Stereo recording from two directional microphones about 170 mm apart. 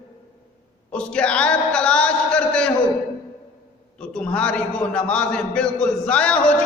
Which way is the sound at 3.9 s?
5° left (ahead or behind).